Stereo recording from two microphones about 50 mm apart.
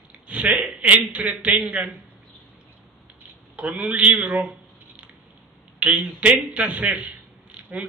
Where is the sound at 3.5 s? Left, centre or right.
Right.